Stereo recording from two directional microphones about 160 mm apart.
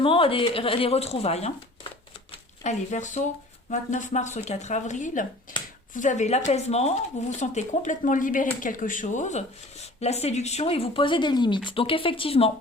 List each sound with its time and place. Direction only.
0.0 s speech: 35° left (ahead or behind)